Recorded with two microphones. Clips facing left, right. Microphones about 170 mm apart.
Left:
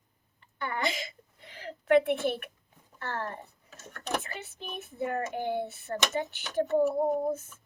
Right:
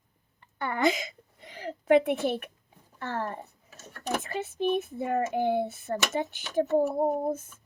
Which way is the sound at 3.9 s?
10° right (ahead or behind).